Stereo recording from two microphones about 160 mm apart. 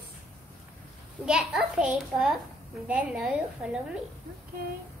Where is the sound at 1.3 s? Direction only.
5° right (ahead or behind).